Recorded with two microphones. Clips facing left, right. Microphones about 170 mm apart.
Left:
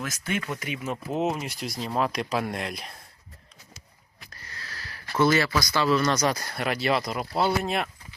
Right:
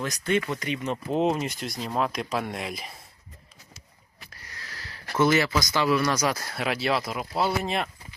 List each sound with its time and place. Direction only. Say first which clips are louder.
0.0 s speech: right 5 dB; 5° left (ahead or behind)
4.4 s wheeze: left 1 dB; 15° right (ahead or behind)
5.2 s speech: even; 15° right (ahead or behind); by 7.9 s centre (ahead or behind)